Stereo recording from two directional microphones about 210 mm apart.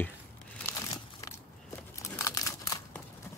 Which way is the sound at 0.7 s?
15° left (ahead or behind).